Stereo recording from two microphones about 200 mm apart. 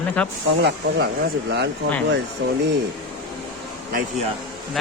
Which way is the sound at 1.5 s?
60° right (ahead or behind).